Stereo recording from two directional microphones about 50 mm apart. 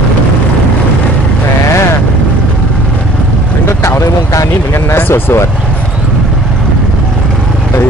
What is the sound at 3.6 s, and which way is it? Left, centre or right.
Speech, left.